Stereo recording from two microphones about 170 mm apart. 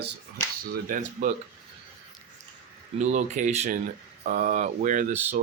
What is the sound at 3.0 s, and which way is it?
Speech, 45° right (ahead or behind).